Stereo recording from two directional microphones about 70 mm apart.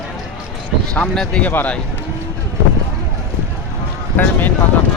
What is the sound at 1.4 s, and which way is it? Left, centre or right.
Speech, left.